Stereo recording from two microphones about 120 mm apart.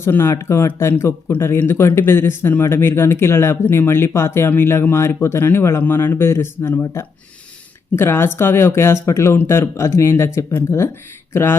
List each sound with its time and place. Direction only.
0.0 s speech: 20° left (ahead or behind)